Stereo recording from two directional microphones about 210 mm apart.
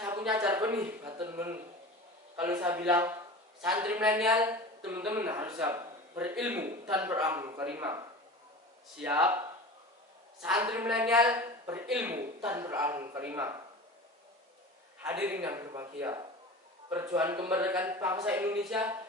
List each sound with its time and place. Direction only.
0.0 s a sound: 20° right (ahead or behind)
0.3 s speech: 10° right (ahead or behind)
10.6 s speech: 5° right (ahead or behind)
15.0 s speech: 10° right (ahead or behind)